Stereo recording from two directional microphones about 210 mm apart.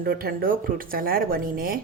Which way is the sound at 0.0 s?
45° right (ahead or behind).